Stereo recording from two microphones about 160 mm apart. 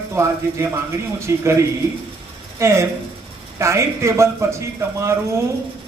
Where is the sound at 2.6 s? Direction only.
15° right (ahead or behind).